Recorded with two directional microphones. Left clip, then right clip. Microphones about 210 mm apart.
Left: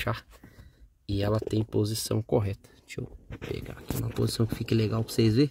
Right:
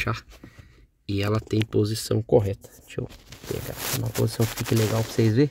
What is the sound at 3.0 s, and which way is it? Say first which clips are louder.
Speech: right 7 dB; 40° left (ahead or behind).